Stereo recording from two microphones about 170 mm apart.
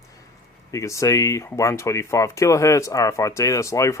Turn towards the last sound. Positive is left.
turn(degrees=20)  # may be behind; listen again after turning